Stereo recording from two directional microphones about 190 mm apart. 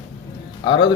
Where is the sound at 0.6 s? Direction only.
25° left (ahead or behind).